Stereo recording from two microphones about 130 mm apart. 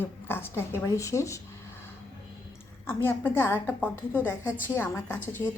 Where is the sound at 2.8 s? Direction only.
15° left (ahead or behind).